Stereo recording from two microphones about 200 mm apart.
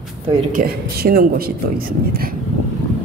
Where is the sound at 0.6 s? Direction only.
50° right (ahead or behind).